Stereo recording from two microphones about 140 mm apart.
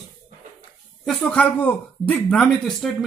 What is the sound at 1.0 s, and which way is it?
A man's voice, 5° left (ahead or behind).